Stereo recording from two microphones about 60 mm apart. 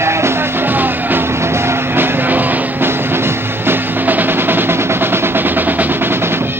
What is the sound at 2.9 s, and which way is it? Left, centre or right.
Music, right.